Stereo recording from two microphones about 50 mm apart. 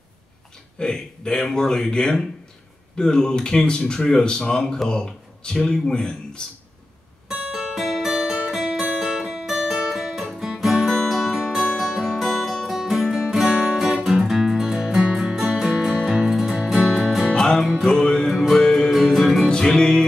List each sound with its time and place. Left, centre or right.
0.7 s speech: centre
7.5 s music: centre
8.5 s guitar: centre
10.2 s music: centre
11.6 s music: centre
16.0 s music: centre
17.8 s music: centre
18.9 s music: centre
19.5 s music: centre